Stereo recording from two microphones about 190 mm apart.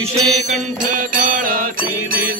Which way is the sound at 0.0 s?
40° right (ahead or behind).